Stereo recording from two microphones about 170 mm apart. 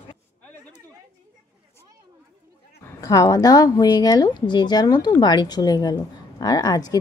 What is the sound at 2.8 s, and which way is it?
A woman's voice, 20° left (ahead or behind).